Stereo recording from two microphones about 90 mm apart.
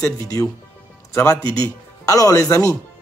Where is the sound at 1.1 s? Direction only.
30° left (ahead or behind).